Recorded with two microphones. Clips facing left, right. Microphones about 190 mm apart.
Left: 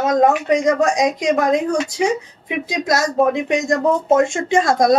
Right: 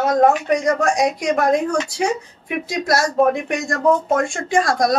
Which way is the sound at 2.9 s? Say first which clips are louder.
Even; 20° left (ahead or behind).